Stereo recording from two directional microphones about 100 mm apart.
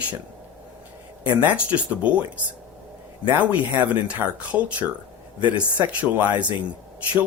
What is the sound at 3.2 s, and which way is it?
Speech, 15° right (ahead or behind).